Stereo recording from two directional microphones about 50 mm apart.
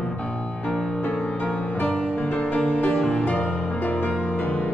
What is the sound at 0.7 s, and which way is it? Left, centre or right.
Music, left.